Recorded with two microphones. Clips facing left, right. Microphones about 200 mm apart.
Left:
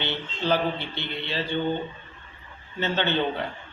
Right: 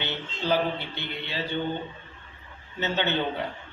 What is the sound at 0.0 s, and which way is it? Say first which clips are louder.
Speech: left 2 dB; 10° right (ahead or behind).